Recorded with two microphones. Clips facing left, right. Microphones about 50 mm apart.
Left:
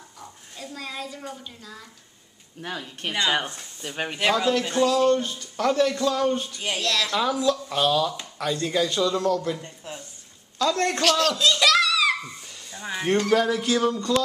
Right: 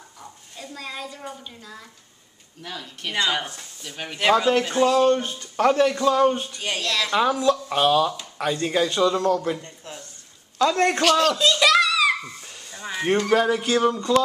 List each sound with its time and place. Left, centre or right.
0.2 s speech: centre
2.6 s speech: left
4.5 s speech: right
6.6 s speech: centre
7.2 s speech: right
9.6 s speech: centre
10.6 s speech: right
11.0 s a sound: centre
12.7 s a sound: centre
13.0 s speech: centre